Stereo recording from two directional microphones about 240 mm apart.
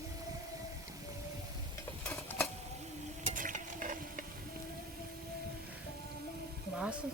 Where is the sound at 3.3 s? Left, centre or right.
Right.